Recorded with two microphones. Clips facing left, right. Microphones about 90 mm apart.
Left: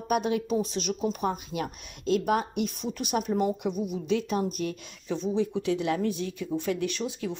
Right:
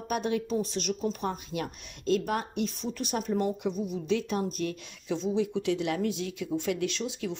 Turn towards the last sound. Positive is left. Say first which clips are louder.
# left 1 dB
turn(degrees=10)  # may be behind; listen again after turning